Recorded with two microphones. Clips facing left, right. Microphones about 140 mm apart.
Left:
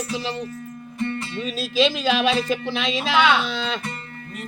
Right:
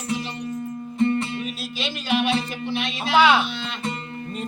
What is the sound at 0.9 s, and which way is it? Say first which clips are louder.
Music: right 6 dB; 25° right (ahead or behind).